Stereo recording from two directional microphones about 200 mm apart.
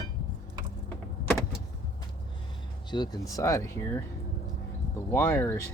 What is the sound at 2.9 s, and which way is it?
Speech, 20° left (ahead or behind).